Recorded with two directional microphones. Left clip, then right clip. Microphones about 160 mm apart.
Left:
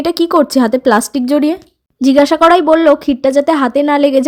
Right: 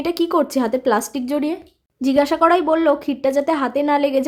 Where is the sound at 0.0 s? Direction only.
30° left (ahead or behind).